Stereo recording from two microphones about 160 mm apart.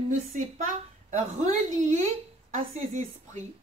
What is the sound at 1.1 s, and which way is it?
A woman's voice, 45° right (ahead or behind).